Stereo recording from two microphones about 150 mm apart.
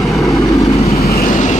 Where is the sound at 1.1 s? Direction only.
65° left (ahead or behind).